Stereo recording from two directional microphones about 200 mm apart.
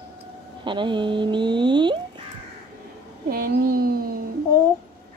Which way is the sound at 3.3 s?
50° right (ahead or behind).